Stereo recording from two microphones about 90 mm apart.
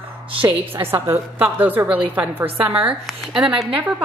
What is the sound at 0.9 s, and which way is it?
A woman's voice, 25° right (ahead or behind).